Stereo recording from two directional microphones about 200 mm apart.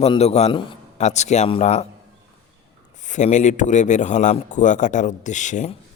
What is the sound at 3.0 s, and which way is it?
Speech, 35° left (ahead or behind).